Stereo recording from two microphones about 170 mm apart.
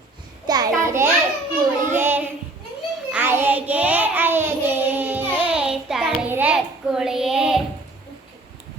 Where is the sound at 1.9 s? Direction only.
15° right (ahead or behind).